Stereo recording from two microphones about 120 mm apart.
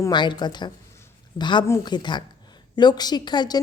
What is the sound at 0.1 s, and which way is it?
A woman's voice, 40° left (ahead or behind).